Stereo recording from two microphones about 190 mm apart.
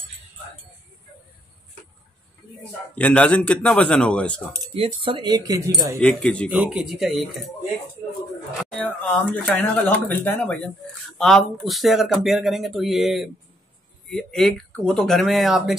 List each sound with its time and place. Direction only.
2.9 s speech: 5° left (ahead or behind)
5.0 s speech: 25° right (ahead or behind)
5.9 s speech: 5° left (ahead or behind)
8.7 s speech: 5° left (ahead or behind)